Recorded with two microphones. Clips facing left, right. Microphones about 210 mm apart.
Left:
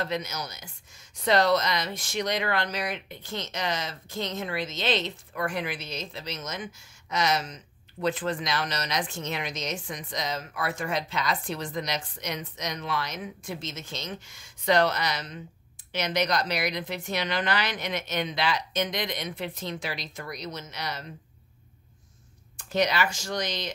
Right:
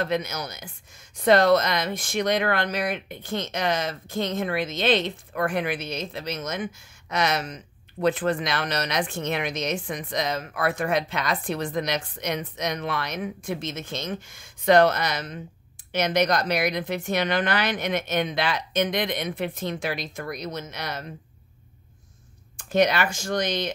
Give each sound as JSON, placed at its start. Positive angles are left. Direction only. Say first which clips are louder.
{"t": 0.0, "sound": "a woman's voice", "louder": "right 4 dB", "side_deg": -55}
{"t": 22.7, "sound": "speech", "louder": "right 4 dB", "side_deg": -55}